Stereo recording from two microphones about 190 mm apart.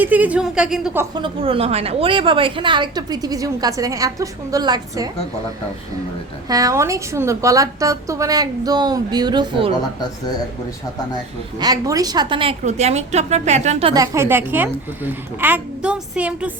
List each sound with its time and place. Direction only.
0.0 s a woman's voice: 10° right (ahead or behind)
1.2 s a woman's voice: 30° right (ahead or behind)
6.5 s a woman's voice: 15° right (ahead or behind)
11.6 s a woman's voice: 20° right (ahead or behind); by 13.9 s 35° right (ahead or behind)
13.9 s a woman's voice: 15° right (ahead or behind)